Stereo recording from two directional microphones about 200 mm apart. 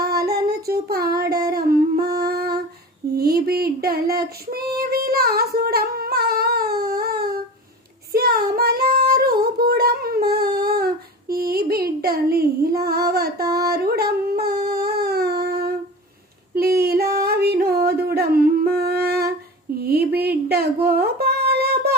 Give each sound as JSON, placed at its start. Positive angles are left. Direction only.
{"t": 0.0, "sound": "child singing", "side_deg": -50}
{"t": 1.5, "sound": "humming", "side_deg": -50}
{"t": 3.2, "sound": "female singing", "side_deg": -50}
{"t": 10.5, "sound": "a sound", "side_deg": -50}
{"t": 11.3, "sound": "female singing", "side_deg": -50}
{"t": 14.8, "sound": "a sound", "side_deg": -50}
{"t": 16.6, "sound": "female singing", "side_deg": -50}
{"t": 17.2, "sound": "singing", "side_deg": -50}
{"t": 19.8, "sound": "humming", "side_deg": -50}